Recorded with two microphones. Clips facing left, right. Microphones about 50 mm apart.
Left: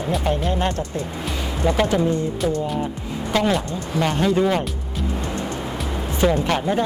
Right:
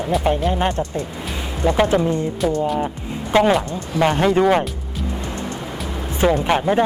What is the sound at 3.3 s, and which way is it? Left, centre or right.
Speech, right.